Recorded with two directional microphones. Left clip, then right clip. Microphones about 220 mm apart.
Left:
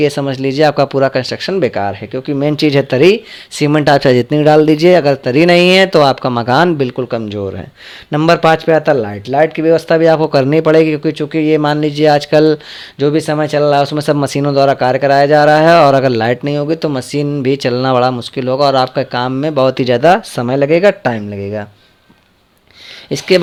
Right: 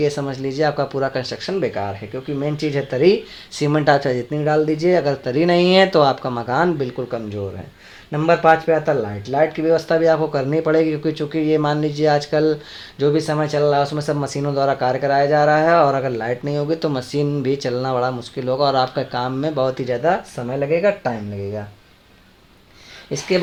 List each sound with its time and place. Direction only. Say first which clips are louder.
0.0 s speech: left 7 dB; 40° left (ahead or behind)